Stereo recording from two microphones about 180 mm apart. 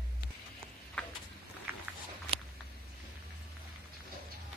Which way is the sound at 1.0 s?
5° left (ahead or behind).